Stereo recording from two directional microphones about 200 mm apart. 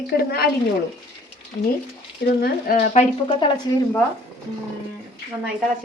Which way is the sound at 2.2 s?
50° left (ahead or behind).